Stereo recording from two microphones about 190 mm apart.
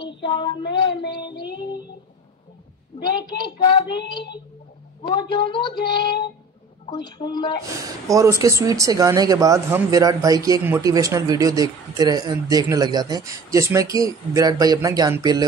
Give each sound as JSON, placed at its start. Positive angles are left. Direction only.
{"t": 0.0, "sound": "child singing", "side_deg": 25}
{"t": 3.2, "sound": "speech", "side_deg": 25}
{"t": 5.0, "sound": "speech", "side_deg": 25}
{"t": 7.8, "sound": "speech", "side_deg": -15}